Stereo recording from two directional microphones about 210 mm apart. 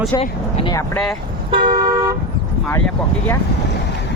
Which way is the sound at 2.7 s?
10° left (ahead or behind).